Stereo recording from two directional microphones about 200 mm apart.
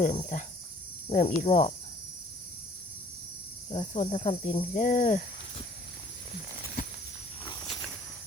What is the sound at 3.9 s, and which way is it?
Speech, 30° left (ahead or behind).